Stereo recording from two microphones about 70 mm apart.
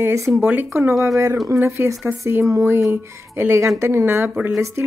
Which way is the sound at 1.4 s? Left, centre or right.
Right.